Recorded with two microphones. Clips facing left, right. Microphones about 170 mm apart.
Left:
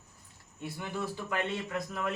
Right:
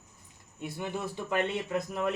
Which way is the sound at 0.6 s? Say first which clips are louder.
Right 2 dB; 20° right (ahead or behind).